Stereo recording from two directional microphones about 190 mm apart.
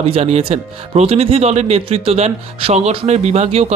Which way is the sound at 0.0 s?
30° right (ahead or behind).